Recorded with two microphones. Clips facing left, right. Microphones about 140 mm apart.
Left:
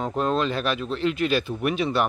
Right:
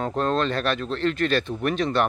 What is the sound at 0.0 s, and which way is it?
Speech, 5° left (ahead or behind).